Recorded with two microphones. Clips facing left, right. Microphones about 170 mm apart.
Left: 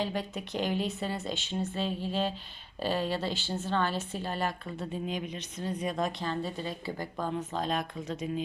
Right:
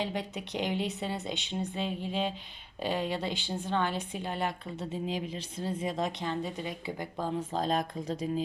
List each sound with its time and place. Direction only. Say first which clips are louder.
0.0 s speech: left 1 dB; 20° right (ahead or behind)